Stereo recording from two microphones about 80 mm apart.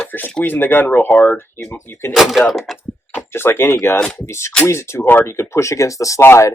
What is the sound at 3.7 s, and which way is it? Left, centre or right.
Speech, left.